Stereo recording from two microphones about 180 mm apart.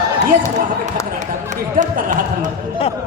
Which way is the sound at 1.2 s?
45° right (ahead or behind).